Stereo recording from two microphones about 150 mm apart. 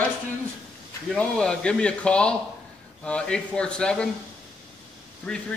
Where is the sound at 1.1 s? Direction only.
5° left (ahead or behind).